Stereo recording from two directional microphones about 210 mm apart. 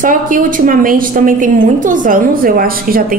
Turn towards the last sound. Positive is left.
turn(degrees=-45)  # may be behind; listen again after turning